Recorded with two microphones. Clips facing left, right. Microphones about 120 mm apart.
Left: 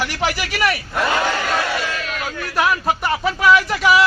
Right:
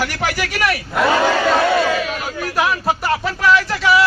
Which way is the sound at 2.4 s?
5° right (ahead or behind).